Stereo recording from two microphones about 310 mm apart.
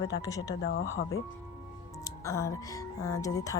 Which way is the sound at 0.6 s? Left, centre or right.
Left.